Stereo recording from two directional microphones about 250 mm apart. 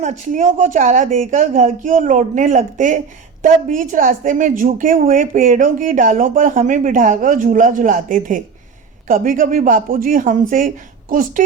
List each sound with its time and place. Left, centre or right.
0.0 s a woman's voice: right